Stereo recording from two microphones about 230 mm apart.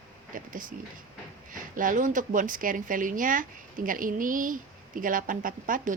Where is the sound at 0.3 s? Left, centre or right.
Right.